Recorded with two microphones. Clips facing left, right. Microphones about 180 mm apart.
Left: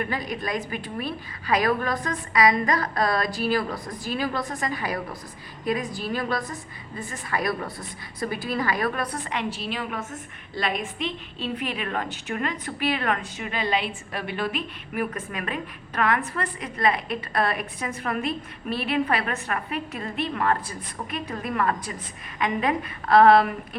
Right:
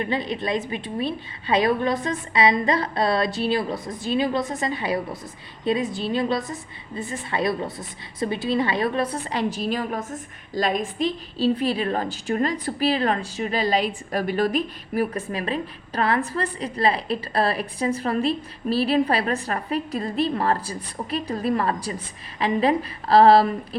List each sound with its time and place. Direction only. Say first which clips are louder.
0.0 s a woman's voice: right 3 dB; 25° right (ahead or behind)